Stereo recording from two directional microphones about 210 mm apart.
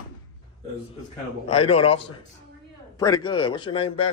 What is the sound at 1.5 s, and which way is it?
Speech, 25° left (ahead or behind).